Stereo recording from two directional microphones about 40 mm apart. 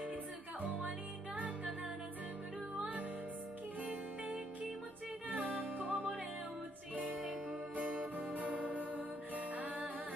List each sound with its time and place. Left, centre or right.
0.6 s music: right
5.3 s music: right
7.7 s music: right